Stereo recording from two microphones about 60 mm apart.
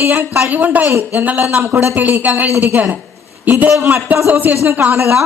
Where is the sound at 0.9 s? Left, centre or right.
Right.